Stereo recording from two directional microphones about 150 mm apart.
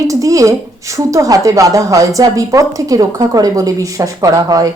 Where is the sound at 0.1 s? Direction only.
20° right (ahead or behind).